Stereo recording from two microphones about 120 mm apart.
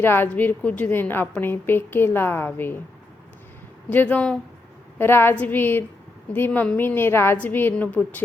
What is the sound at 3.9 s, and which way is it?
A woman's voice, 15° left (ahead or behind).